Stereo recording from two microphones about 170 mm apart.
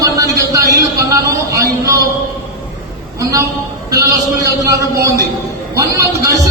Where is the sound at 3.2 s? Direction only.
20° right (ahead or behind).